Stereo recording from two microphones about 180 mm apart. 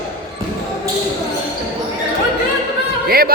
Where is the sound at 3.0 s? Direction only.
60° right (ahead or behind).